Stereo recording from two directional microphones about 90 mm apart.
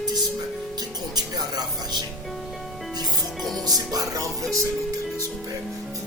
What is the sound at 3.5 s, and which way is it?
Speech, 45° right (ahead or behind).